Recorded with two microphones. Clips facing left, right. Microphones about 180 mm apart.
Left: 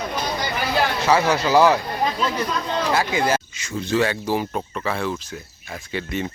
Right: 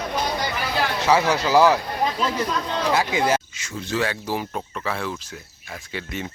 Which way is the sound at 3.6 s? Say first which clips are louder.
Left 4 dB; 5° right (ahead or behind).